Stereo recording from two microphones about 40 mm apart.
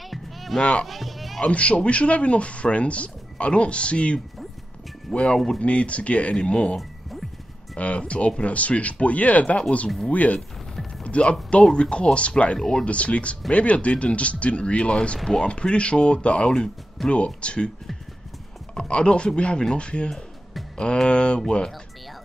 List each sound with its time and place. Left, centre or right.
0.0 s music: centre
0.6 s speech: left
0.8 s music: centre
1.4 s speech: left
6.8 s music: centre
7.7 s speech: left
12.5 s speech: centre
12.8 s speech: left
18.8 s speech: left